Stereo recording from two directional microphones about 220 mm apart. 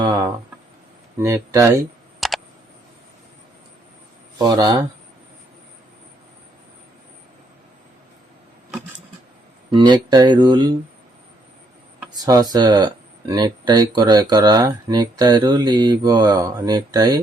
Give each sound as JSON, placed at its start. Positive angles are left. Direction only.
{"t": 0.0, "sound": "a sound", "side_deg": -20}
{"t": 1.2, "sound": "speech", "side_deg": -15}
{"t": 2.2, "sound": "a sound", "side_deg": 0}
{"t": 4.4, "sound": "speech", "side_deg": -20}
{"t": 9.7, "sound": "speech", "side_deg": -20}
{"t": 11.9, "sound": "speech", "side_deg": -15}